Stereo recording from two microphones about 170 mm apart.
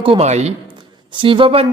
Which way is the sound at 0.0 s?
35° right (ahead or behind).